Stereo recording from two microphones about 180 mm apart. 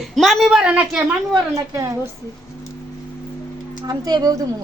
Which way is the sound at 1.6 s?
20° right (ahead or behind).